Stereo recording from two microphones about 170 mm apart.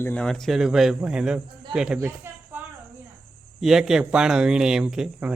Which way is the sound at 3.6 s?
5° right (ahead or behind).